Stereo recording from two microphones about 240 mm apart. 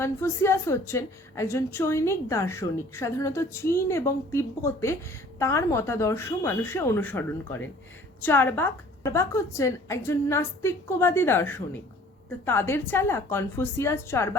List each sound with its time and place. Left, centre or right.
0.0 s a woman's voice: centre